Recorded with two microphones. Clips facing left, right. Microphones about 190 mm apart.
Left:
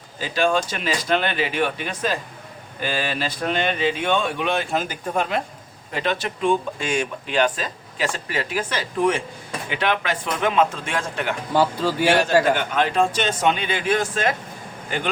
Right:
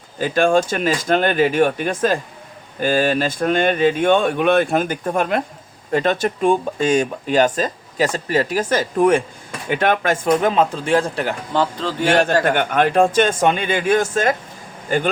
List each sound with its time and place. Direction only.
0.2 s speech: 50° right (ahead or behind); by 11.3 s 35° right (ahead or behind)
11.5 s speech: 10° left (ahead or behind)
12.5 s speech: 55° right (ahead or behind)